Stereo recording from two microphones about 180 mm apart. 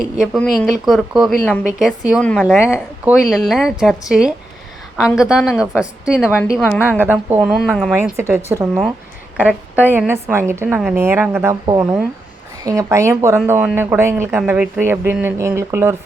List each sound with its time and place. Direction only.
0.2 s a woman's voice: centre (ahead or behind)
6.4 s a woman's voice: 10° left (ahead or behind)
6.7 s speech: 10° right (ahead or behind)
8.1 s a woman's voice: 15° right (ahead or behind)
12.6 s speech: 15° right (ahead or behind)